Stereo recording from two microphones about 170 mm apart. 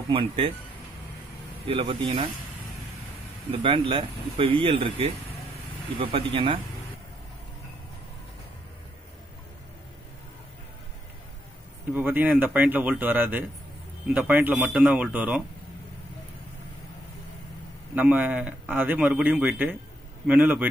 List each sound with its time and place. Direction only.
0.1 s speech: 30° right (ahead or behind)
1.7 s speech: 30° right (ahead or behind)
3.6 s speech: 35° right (ahead or behind)
11.9 s speech: 10° right (ahead or behind)
17.9 s speech: 10° right (ahead or behind)